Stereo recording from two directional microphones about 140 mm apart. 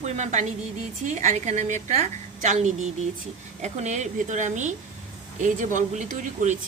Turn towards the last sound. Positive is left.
turn(degrees=-60)  # may be behind; listen again after turning